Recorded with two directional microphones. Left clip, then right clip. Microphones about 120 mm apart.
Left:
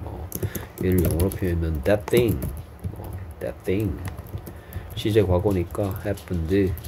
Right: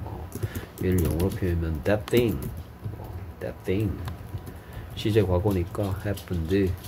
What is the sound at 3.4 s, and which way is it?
Speech, 30° left (ahead or behind).